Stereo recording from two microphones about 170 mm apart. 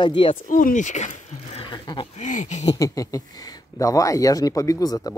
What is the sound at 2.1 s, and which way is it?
Speech, 45° left (ahead or behind).